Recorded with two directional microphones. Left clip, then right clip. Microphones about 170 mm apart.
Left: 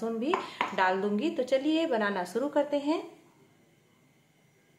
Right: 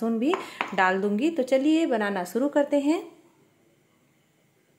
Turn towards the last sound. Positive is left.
turn(degrees=-40)  # may be behind; listen again after turning